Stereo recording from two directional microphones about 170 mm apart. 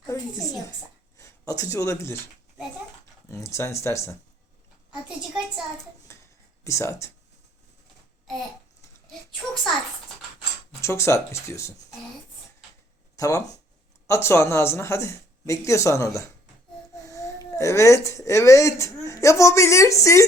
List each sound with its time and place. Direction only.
0.1 s a woman's voice: 20° left (ahead or behind)
3.2 s speech: 15° left (ahead or behind)
6.1 s a sound: 15° left (ahead or behind)
6.7 s speech: 15° left (ahead or behind)
10.8 s speech: 15° left (ahead or behind)
13.1 s speech: 20° left (ahead or behind)